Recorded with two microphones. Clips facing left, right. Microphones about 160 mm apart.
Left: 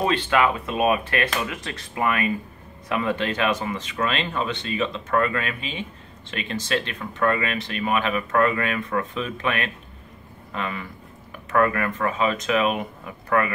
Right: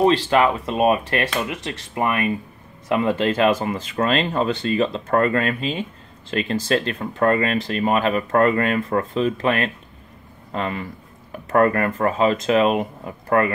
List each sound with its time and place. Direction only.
0.0 s speech: 35° right (ahead or behind)